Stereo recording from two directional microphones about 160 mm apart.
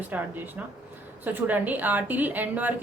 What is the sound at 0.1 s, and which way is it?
Speech, 10° right (ahead or behind).